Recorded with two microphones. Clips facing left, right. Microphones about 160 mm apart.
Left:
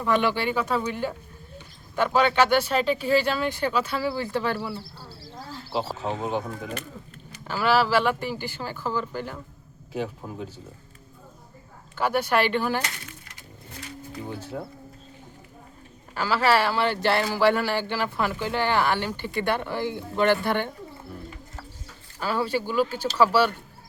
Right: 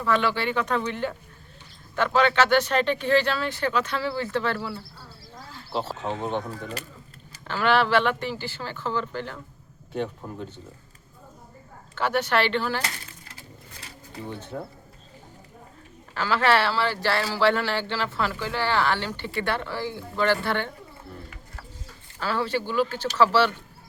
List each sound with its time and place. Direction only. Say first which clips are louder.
0.0 s speech: left 1 dB; 15° left (ahead or behind)
4.9 s a sound: left 3 dB; 35° left (ahead or behind)
5.7 s speech: left 1 dB; 5° left (ahead or behind)
11.9 s speech: left 1 dB; 10° left (ahead or behind)
14.3 s speech: even; 5° left (ahead or behind)
16.1 s speech: even; 10° left (ahead or behind)
22.2 s speech: left 1 dB; 15° left (ahead or behind)